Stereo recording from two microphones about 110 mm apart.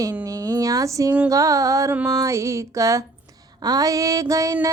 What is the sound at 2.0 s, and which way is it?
Music, 30° right (ahead or behind).